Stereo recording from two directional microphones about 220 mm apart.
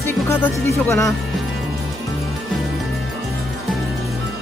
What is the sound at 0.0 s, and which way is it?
Speech, 10° left (ahead or behind).